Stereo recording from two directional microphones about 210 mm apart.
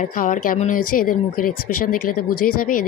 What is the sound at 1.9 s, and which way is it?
Speech, 90° left.